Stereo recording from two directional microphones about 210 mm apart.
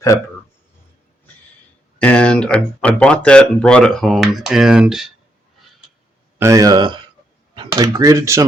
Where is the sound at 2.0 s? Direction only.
5° left (ahead or behind).